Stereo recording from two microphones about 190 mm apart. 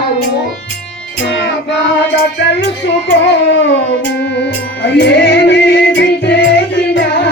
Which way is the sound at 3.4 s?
70° left (ahead or behind).